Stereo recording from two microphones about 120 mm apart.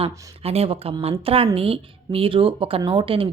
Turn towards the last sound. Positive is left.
turn(degrees=-50)  # may be behind; listen again after turning